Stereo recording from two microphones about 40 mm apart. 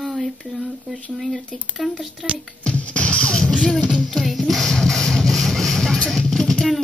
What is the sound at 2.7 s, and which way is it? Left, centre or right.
Music, left.